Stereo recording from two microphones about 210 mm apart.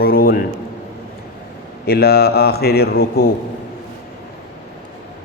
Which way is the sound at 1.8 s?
50° left (ahead or behind).